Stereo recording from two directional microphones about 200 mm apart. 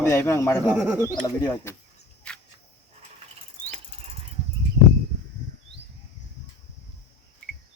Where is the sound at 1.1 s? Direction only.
20° left (ahead or behind).